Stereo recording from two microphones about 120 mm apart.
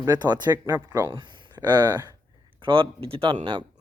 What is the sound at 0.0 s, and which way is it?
Speech, 35° right (ahead or behind).